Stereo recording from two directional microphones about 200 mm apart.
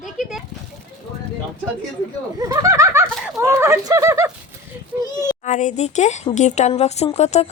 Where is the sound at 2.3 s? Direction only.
15° right (ahead or behind).